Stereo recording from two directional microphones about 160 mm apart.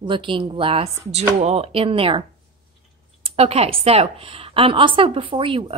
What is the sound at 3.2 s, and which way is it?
A woman's voice, 40° right (ahead or behind).